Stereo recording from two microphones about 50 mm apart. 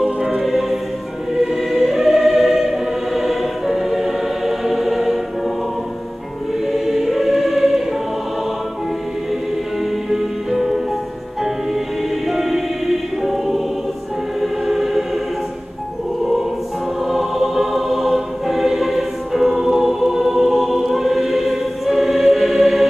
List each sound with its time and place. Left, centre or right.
0.0 s music: centre
1.3 s choir: centre
6.7 s choir: centre
10.0 s music: centre
12.3 s choir: centre
17.1 s music: centre